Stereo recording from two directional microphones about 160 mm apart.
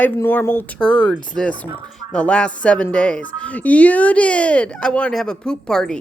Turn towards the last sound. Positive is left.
turn(degrees=5)  # may be behind; listen again after turning